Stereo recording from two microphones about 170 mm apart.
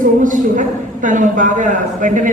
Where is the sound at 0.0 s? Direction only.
50° right (ahead or behind).